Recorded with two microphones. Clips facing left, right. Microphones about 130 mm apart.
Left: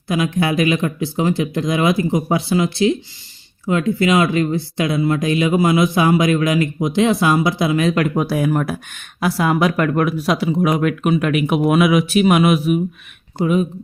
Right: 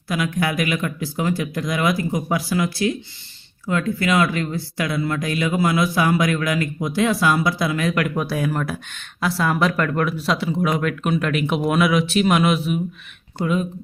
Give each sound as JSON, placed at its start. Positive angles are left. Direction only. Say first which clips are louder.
{"t": 0.1, "sound": "speech", "louder": "left 4 dB", "side_deg": 25}